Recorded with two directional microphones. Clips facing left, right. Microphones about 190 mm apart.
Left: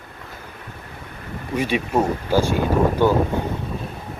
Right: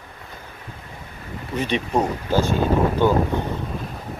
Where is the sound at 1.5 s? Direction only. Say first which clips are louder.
Left 1 dB; 10° left (ahead or behind).